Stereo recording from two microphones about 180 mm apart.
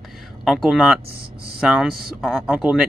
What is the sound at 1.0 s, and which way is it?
Speech, 60° right (ahead or behind).